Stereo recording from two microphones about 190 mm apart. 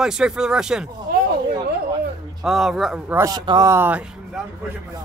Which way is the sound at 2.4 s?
Centre (ahead or behind).